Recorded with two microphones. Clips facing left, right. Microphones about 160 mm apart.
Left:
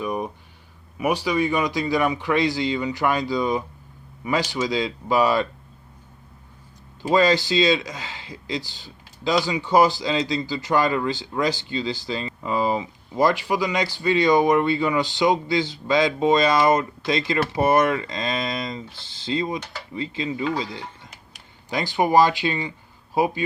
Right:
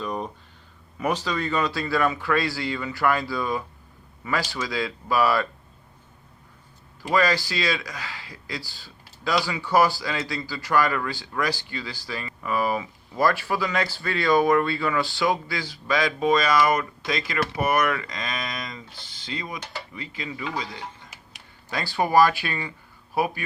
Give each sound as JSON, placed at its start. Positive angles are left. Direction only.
{"t": 0.0, "sound": "a sound", "side_deg": 10}
{"t": 0.9, "sound": "speech", "side_deg": 10}
{"t": 7.1, "sound": "speech", "side_deg": 25}
{"t": 21.7, "sound": "speech", "side_deg": 20}